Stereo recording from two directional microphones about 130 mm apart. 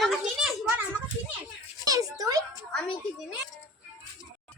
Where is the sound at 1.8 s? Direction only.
25° right (ahead or behind).